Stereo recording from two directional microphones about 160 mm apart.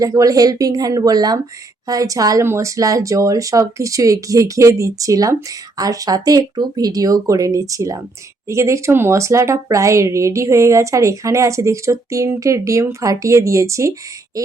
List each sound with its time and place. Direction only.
0.0 s speech: 20° right (ahead or behind)